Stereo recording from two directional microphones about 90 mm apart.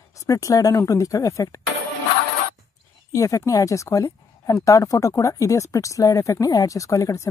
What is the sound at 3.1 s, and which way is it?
Speech, 35° left (ahead or behind).